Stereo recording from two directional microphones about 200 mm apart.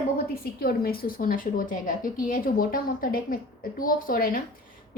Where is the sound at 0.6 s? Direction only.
45° left (ahead or behind).